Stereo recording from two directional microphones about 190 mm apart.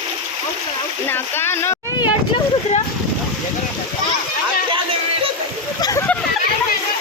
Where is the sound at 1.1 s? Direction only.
10° left (ahead or behind).